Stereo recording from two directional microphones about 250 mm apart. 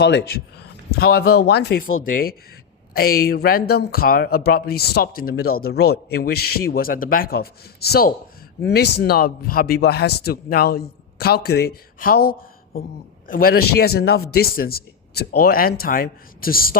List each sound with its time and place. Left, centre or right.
0.0 s a man's voice: left